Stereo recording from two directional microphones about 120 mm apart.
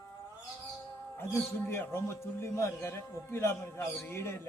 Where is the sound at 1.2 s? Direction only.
20° left (ahead or behind).